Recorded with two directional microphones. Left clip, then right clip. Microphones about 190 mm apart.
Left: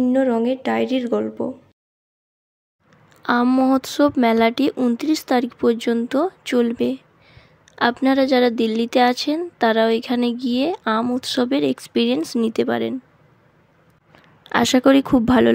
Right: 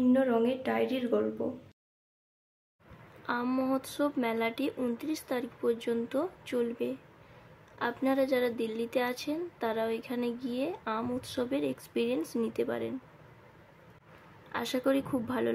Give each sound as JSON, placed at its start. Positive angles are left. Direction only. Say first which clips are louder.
{"t": 0.1, "sound": "speech", "louder": "left 8 dB", "side_deg": 40}
{"t": 3.2, "sound": "speech", "louder": "left 14 dB", "side_deg": 50}
{"t": 14.5, "sound": "speech", "louder": "left 15 dB", "side_deg": 50}